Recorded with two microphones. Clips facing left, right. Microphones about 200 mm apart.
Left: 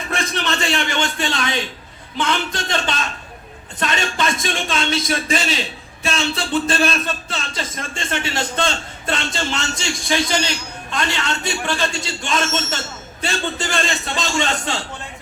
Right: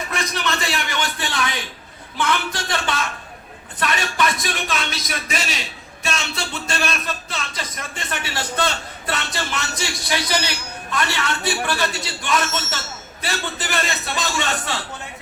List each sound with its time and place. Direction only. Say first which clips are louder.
0.1 s a man's voice: left 4 dB; 30° left (ahead or behind)